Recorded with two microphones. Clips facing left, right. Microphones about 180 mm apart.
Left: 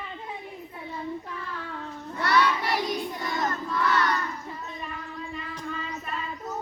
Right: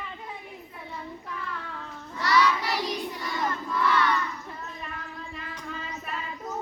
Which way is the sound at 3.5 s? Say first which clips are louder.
Right 3 dB; 40° left (ahead or behind).